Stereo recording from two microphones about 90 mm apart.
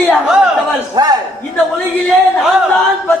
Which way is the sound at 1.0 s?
50° right (ahead or behind).